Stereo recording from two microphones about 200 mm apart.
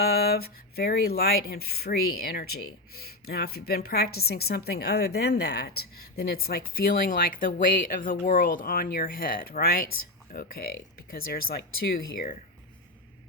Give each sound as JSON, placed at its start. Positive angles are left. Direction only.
{"t": 0.0, "sound": "a woman's voice", "side_deg": 50}